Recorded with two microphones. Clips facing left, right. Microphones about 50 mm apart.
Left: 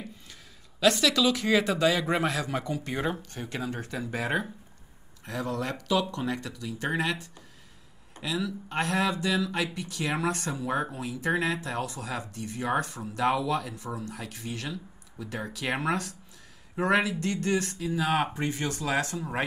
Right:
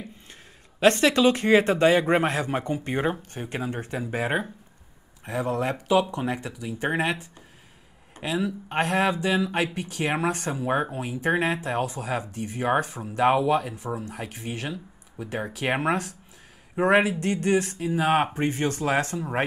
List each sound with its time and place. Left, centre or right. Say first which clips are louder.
0.7 s a man's voice: right 4 dB; right
8.2 s a man's voice: right 4 dB; right
13.8 s speech: right 4 dB; centre
14.1 s a man's voice: right 3 dB; right